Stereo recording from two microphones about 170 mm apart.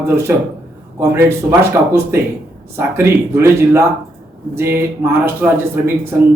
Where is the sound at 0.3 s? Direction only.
15° right (ahead or behind).